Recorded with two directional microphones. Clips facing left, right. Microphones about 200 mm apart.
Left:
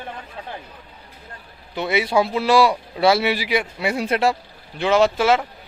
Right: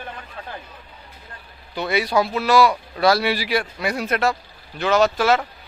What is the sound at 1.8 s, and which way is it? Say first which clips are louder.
Speech: left 1 dB; 20° left (ahead or behind).